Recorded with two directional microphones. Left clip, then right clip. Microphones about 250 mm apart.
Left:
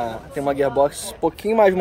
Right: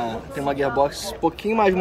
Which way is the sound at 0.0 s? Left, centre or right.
Left.